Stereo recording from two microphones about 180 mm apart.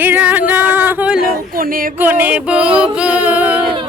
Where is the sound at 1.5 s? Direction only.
55° right (ahead or behind).